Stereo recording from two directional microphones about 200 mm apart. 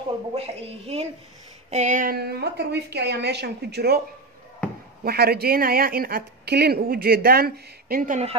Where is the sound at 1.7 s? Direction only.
40° right (ahead or behind); by 3.9 s 55° right (ahead or behind).